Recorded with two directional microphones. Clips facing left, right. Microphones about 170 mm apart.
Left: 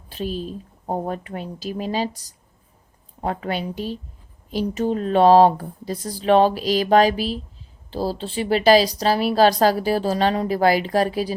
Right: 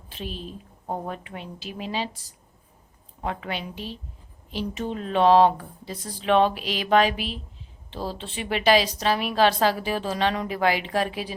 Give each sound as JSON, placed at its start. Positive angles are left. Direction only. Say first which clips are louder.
{"t": 0.1, "sound": "a woman's voice", "louder": "left 8 dB", "side_deg": 40}